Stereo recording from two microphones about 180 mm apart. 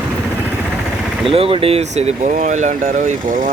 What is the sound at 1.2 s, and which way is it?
Speech, 30° right (ahead or behind).